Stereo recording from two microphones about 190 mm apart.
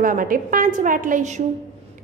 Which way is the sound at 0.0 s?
45° right (ahead or behind).